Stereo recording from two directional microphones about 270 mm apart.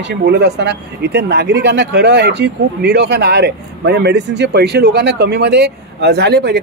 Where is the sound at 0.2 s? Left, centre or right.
Right.